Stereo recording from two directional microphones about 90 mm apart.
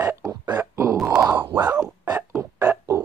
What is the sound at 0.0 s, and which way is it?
Burping, 35° right (ahead or behind).